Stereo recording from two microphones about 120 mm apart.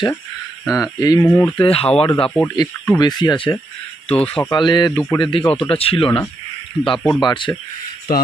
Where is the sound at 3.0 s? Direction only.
35° left (ahead or behind).